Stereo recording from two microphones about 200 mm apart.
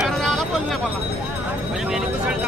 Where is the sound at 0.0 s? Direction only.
Centre (ahead or behind).